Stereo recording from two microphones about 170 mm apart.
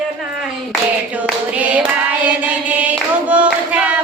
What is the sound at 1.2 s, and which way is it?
Clapping, 10° right (ahead or behind).